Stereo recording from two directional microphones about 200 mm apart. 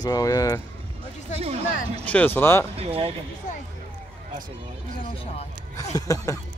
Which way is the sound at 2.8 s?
30° right (ahead or behind).